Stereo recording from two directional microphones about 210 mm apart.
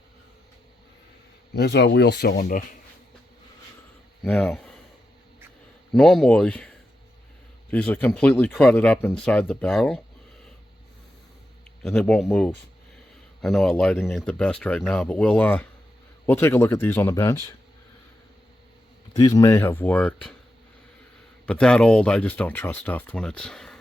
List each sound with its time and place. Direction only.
1.5 s speech: 55° left (ahead or behind)
2.3 s speech: 40° left (ahead or behind)
4.2 s speech: 5° left (ahead or behind)
5.9 s speech: centre (ahead or behind)
7.7 s speech: 5° left (ahead or behind)
11.8 s speech: 5° left (ahead or behind)
19.1 s speech: 15° left (ahead or behind)
21.4 s speech: 5° left (ahead or behind)